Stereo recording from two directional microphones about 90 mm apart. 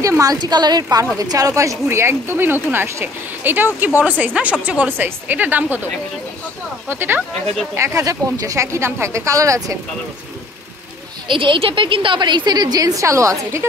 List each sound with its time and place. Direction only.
0.0 s a woman's voice: 40° right (ahead or behind); by 5.8 s 20° right (ahead or behind)
6.9 s a woman's voice: 25° right (ahead or behind)
7.7 s speech: 35° right (ahead or behind)
11.2 s a woman's voice: 70° right (ahead or behind); by 13.7 s 35° right (ahead or behind)